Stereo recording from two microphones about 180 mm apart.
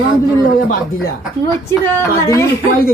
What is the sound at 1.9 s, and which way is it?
Speech, 15° left (ahead or behind).